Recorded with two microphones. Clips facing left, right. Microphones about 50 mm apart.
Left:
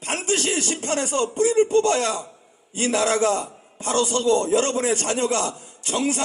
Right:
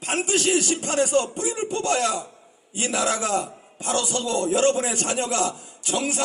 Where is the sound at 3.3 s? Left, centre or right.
Right.